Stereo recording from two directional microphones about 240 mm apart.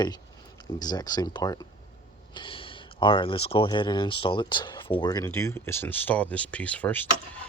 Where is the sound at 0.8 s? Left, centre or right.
Centre.